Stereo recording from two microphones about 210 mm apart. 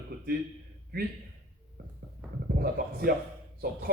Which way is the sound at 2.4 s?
45° right (ahead or behind).